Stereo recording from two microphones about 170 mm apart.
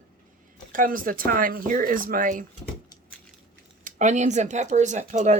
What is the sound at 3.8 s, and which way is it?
Speech, 45° right (ahead or behind).